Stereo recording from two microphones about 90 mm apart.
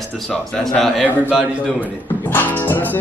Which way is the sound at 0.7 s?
Centre (ahead or behind).